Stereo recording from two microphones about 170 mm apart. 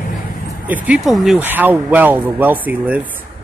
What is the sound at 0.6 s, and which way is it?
Speech, 10° right (ahead or behind).